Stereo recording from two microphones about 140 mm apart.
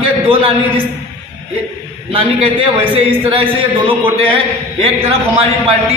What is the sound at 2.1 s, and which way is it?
A man's voice, 40° right (ahead or behind).